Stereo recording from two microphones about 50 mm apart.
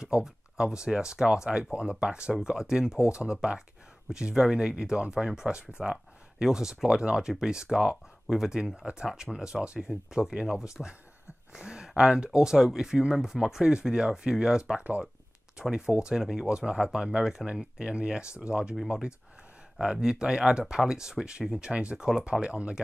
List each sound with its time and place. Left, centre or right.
0.0 s speech: centre
14.8 s speech: right
15.7 s speech: centre